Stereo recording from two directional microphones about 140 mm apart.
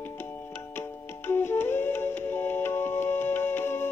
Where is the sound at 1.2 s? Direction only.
15° left (ahead or behind).